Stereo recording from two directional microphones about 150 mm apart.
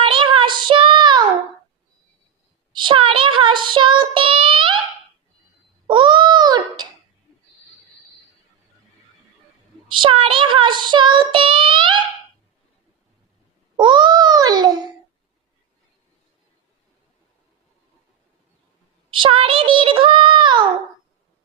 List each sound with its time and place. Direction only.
0.0 s child singing: 35° right (ahead or behind)
2.7 s child singing: 35° right (ahead or behind)
5.9 s babbling: 30° right (ahead or behind)
9.9 s child singing: 35° right (ahead or behind)
13.7 s babbling: 30° right (ahead or behind)
19.1 s child singing: 35° right (ahead or behind)